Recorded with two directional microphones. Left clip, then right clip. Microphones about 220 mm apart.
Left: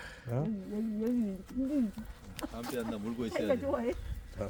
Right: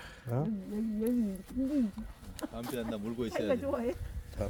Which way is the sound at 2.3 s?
45° right (ahead or behind).